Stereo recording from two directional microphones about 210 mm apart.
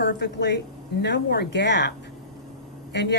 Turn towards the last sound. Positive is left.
turn(degrees=55)  # may be behind; listen again after turning